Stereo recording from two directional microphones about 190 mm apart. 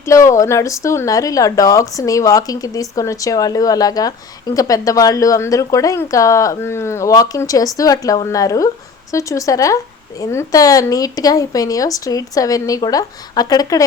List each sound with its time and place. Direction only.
0.0 s speech: 15° left (ahead or behind)